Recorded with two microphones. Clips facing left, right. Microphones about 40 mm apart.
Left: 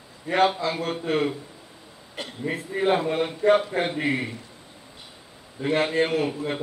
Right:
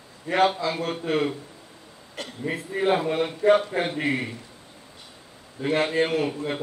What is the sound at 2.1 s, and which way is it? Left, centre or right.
Speech, left.